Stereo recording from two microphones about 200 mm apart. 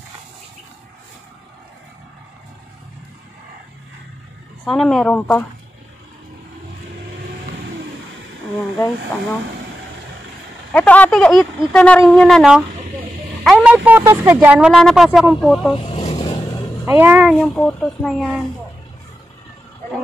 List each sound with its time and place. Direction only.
4.6 s speech: centre (ahead or behind)
10.7 s speech: 10° left (ahead or behind)
15.8 s vehicle: 30° left (ahead or behind)
16.8 s speech: 10° right (ahead or behind)